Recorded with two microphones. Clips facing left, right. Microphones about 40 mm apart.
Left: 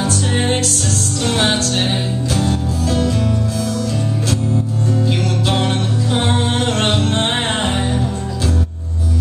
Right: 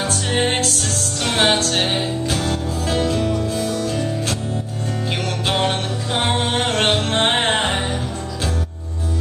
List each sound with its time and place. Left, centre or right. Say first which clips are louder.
1.2 s music: even; right
6.1 s music: even; right
7.2 s music: right 1 dB; right